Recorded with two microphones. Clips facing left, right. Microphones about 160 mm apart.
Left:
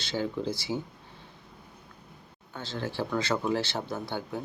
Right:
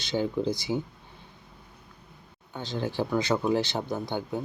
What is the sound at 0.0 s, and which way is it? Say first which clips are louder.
Speech: right 4 dB; 15° right (ahead or behind).